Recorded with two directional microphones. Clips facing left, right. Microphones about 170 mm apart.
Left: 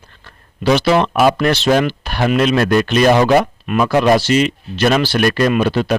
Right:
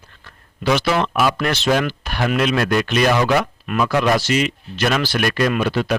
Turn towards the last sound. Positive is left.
turn(degrees=30)  # may be behind; listen again after turning